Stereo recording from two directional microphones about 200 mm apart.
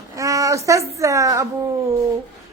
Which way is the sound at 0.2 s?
15° right (ahead or behind).